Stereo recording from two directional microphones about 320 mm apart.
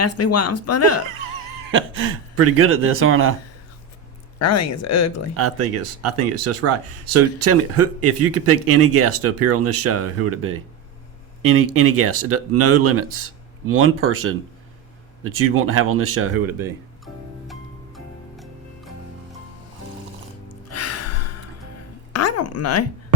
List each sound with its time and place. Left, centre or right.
0.0 s speech: left
1.7 s speech: right
4.4 s speech: left
5.4 s speech: right
15.4 s speech: right
17.5 s music: centre
20.5 s music: left
22.1 s a sound: left